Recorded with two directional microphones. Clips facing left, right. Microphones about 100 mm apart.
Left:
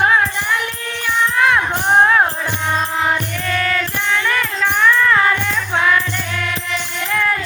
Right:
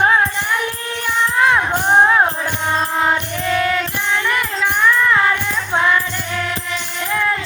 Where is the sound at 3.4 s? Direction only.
15° right (ahead or behind).